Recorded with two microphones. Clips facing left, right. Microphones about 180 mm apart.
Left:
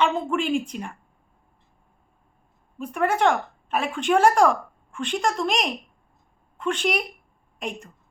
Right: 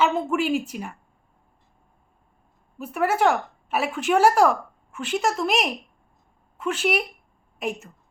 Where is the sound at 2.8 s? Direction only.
5° right (ahead or behind).